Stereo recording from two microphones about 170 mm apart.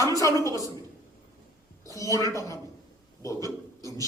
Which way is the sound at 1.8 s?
20° left (ahead or behind).